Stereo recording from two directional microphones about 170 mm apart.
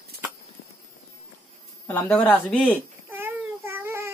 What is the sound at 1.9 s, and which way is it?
Speech, 10° left (ahead or behind).